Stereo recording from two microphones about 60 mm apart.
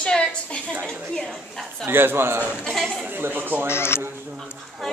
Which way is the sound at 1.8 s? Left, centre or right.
Right.